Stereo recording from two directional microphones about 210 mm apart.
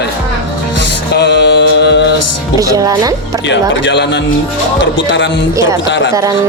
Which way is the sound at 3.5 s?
55° left (ahead or behind).